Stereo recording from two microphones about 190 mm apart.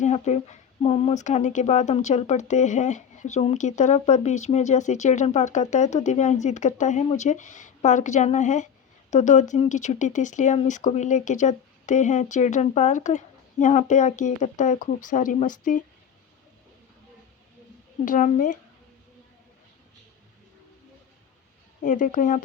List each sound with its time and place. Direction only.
0.0 s speech: 35° left (ahead or behind)
18.0 s a woman's voice: 45° left (ahead or behind)
21.8 s a woman's voice: 45° left (ahead or behind)